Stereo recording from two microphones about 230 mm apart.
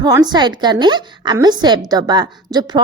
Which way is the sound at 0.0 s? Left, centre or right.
Centre.